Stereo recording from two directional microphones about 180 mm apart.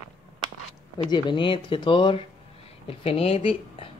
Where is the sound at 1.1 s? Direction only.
25° left (ahead or behind).